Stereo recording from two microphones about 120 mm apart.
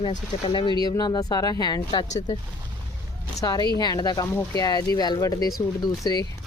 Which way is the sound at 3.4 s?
35° left (ahead or behind).